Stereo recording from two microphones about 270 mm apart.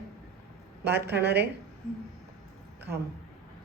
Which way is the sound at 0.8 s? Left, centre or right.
Right.